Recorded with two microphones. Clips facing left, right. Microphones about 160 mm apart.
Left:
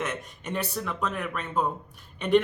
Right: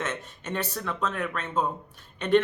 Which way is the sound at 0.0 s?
10° left (ahead or behind).